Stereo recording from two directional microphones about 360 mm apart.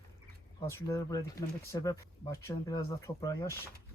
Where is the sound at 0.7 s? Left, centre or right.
Centre.